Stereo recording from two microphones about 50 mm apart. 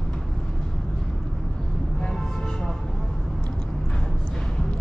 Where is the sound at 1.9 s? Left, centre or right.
Centre.